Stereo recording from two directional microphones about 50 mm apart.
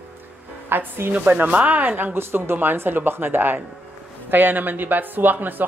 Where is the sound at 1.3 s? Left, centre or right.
Right.